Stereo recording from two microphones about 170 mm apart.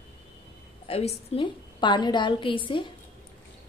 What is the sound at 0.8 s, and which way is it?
A woman's voice, 35° left (ahead or behind).